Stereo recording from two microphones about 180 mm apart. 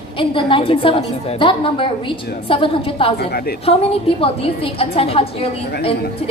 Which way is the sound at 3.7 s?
35° left (ahead or behind).